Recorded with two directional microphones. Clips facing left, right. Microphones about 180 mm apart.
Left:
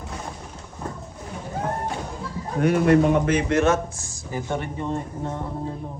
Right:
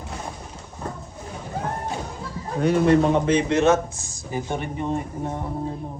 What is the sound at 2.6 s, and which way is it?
Speech, 30° right (ahead or behind).